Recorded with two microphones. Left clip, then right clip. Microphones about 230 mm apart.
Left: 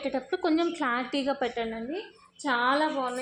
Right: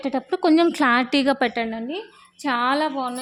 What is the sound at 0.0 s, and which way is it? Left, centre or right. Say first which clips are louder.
A woman's voice: right 7 dB; right.